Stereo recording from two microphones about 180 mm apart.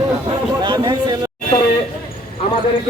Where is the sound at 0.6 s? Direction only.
25° right (ahead or behind).